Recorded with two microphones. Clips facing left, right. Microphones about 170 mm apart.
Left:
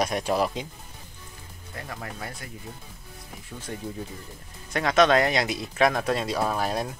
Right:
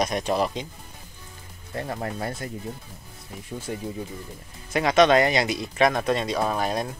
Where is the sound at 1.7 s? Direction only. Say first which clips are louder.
Right 7 dB; 35° right (ahead or behind).